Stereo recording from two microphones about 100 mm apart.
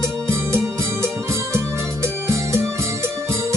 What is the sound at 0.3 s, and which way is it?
Music, 25° right (ahead or behind).